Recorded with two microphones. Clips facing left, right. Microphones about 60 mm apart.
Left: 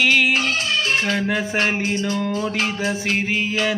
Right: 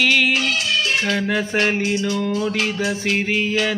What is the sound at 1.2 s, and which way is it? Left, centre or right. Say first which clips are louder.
Music: right 1 dB; centre.